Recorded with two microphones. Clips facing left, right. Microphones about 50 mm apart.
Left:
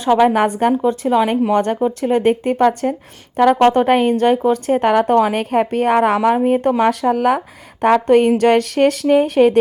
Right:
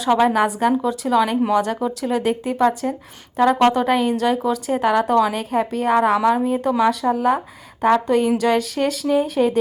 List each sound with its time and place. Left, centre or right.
0.1 s speech: left
0.3 s a woman's voice: left
0.9 s speech: left
1.5 s a woman's voice: left